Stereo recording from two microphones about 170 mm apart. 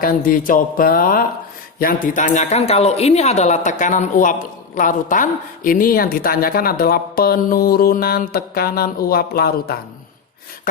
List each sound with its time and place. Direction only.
0.0 s speech: 55° left (ahead or behind)